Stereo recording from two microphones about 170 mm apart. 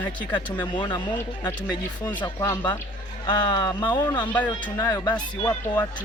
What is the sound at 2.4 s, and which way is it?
Speech, 20° left (ahead or behind).